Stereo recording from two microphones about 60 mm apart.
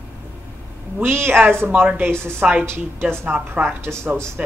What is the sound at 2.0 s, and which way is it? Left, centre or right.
Speech, right.